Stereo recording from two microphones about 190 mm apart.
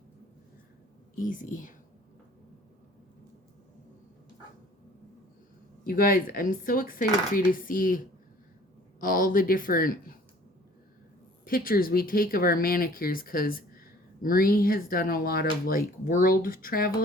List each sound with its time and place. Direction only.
1.1 s speech: 45° left (ahead or behind)
5.8 s speech: 45° left (ahead or behind)
11.4 s speech: 50° left (ahead or behind)